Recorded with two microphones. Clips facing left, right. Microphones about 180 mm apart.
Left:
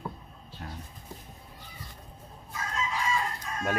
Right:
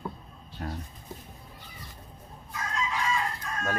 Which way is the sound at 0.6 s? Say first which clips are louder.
Right 6 dB; 50° right (ahead or behind).